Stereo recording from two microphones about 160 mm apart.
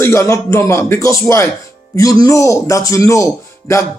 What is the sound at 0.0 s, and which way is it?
Speech, 20° left (ahead or behind).